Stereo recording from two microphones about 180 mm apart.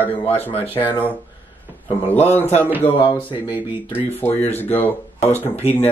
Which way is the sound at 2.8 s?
30° left (ahead or behind).